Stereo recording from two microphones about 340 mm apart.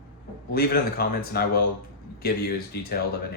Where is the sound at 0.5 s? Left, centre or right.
Left.